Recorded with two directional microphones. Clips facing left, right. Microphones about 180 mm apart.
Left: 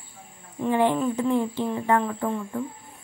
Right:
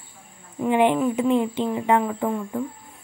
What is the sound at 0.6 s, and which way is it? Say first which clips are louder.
Speech: right 3 dB; 15° right (ahead or behind).